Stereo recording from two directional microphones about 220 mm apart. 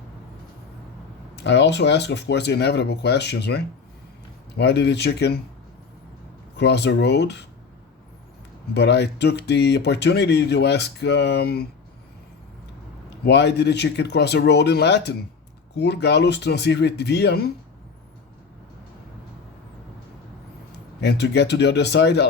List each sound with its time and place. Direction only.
1.5 s speech: 50° left (ahead or behind)
6.6 s speech: 50° left (ahead or behind)
8.7 s speech: 50° left (ahead or behind)
13.2 s speech: 50° left (ahead or behind)
21.0 s speech: 50° left (ahead or behind)